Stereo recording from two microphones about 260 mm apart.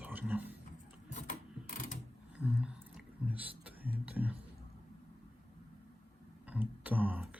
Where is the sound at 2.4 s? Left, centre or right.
Centre.